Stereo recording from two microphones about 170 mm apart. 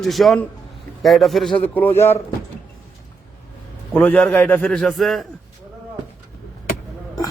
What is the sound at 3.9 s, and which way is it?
Speech, 10° left (ahead or behind).